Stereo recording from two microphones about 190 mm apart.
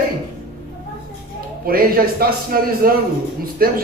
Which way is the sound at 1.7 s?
50° right (ahead or behind).